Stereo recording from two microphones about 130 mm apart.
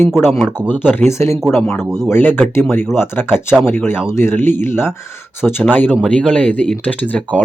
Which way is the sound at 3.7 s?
15° left (ahead or behind).